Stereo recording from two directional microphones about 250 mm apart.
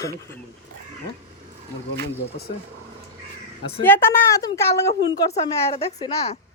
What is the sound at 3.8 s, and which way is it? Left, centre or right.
A woman's voice, centre.